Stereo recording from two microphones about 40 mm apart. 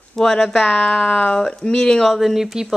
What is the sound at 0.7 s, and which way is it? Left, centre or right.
Speech, left.